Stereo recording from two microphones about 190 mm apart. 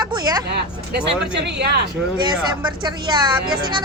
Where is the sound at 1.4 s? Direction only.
60° right (ahead or behind).